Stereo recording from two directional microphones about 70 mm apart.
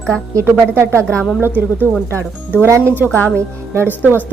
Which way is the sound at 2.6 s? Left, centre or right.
Right.